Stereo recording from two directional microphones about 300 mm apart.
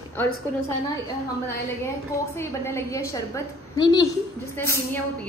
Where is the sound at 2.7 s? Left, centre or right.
Centre.